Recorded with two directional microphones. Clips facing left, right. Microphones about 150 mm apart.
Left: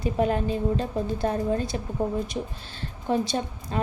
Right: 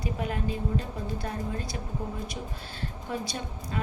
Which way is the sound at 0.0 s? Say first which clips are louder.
Left 8 dB; 30° left (ahead or behind).